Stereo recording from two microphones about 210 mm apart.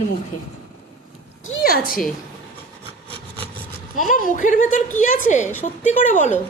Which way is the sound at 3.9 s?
40° left (ahead or behind).